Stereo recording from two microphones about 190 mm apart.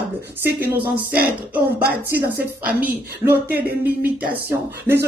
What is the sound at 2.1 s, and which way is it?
Speech, 55° right (ahead or behind).